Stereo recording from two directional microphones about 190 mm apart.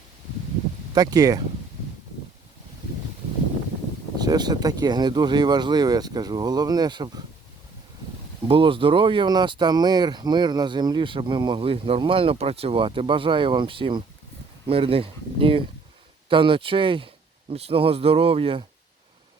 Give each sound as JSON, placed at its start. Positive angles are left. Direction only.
{"t": 0.9, "sound": "speech", "side_deg": -20}
{"t": 4.2, "sound": "speech", "side_deg": -20}
{"t": 8.4, "sound": "speech", "side_deg": -30}